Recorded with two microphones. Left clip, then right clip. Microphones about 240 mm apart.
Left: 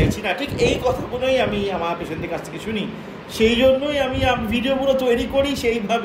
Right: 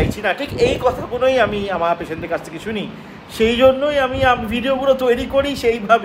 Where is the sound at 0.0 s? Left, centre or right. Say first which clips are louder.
Right 2 dB; centre.